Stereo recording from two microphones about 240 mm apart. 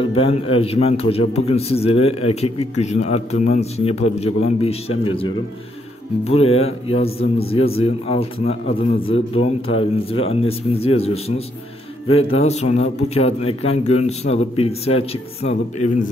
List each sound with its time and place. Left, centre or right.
0.0 s a man's voice: left